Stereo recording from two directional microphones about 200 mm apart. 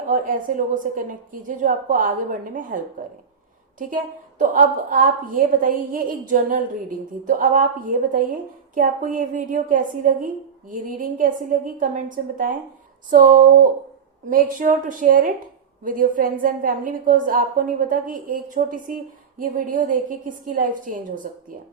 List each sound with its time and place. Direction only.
0.1 s a woman's voice: 40° right (ahead or behind)